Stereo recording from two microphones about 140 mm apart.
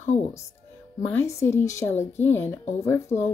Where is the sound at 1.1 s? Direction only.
20° left (ahead or behind).